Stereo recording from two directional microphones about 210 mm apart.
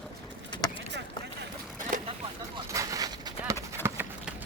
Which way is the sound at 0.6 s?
15° left (ahead or behind).